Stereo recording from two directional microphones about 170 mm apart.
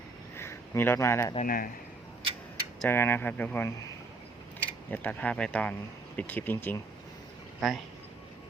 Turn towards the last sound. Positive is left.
turn(degrees=0)  # may be behind; listen again after turning